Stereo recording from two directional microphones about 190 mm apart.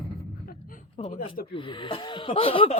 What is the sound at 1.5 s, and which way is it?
Speech, 25° left (ahead or behind).